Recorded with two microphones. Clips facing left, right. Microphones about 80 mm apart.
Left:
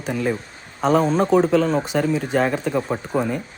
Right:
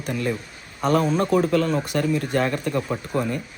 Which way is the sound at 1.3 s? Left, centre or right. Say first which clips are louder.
Left 3 dB; left.